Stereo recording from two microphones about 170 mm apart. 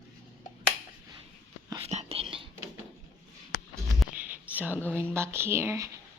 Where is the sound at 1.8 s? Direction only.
40° right (ahead or behind).